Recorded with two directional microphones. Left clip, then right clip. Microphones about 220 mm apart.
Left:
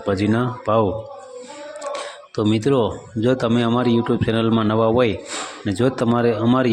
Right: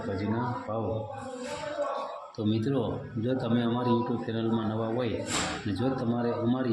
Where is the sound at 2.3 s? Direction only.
35° left (ahead or behind).